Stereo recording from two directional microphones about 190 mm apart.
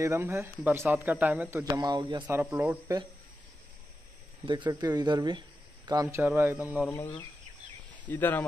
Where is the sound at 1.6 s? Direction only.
20° right (ahead or behind).